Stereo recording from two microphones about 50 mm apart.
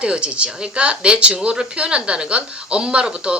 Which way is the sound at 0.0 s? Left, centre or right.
Right.